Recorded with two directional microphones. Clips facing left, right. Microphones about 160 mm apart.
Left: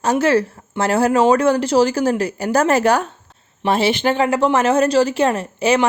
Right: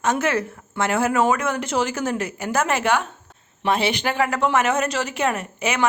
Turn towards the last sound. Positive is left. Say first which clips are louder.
# left 8 dB
turn(degrees=30)  # may be behind; listen again after turning